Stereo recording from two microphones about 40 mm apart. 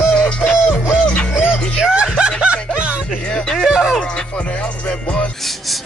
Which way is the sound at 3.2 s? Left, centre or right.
Left.